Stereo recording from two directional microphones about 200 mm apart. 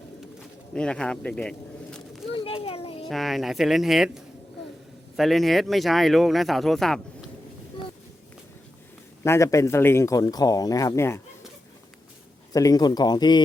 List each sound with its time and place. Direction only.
0.7 s speech: 5° left (ahead or behind)
2.3 s children playing: 25° left (ahead or behind)
3.1 s speech: centre (ahead or behind)
9.2 s speech: 15° left (ahead or behind)
12.5 s a man's voice: 20° left (ahead or behind)